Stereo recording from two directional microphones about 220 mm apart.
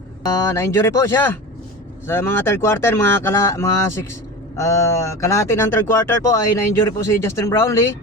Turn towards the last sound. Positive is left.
turn(degrees=10)  # may be behind; listen again after turning